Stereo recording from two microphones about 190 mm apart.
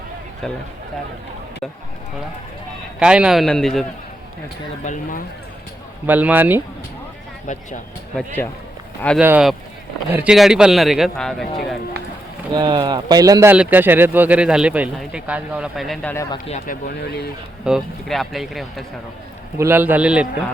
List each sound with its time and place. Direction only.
0.4 s a man's voice: centre (ahead or behind)
3.0 s a man's voice: 5° right (ahead or behind)
4.9 s speech: 45° left (ahead or behind)
6.1 s speech: 10° right (ahead or behind)
7.4 s speech: 40° left (ahead or behind)
9.1 s a man's voice: 5° right (ahead or behind)
12.5 s speech: 25° right (ahead or behind); by 16.1 s centre (ahead or behind)
16.5 s speech: 40° left (ahead or behind); by 17.3 s 60° left (ahead or behind)
17.7 s a man's voice: centre (ahead or behind)
19.5 s speech: 10° right (ahead or behind)